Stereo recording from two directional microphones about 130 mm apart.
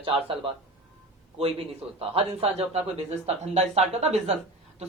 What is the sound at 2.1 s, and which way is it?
A woman's voice, 45° right (ahead or behind).